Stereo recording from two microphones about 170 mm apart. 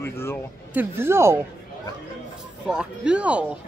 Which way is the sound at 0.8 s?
15° right (ahead or behind).